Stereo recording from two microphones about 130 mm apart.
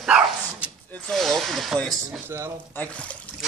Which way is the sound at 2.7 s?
10° left (ahead or behind).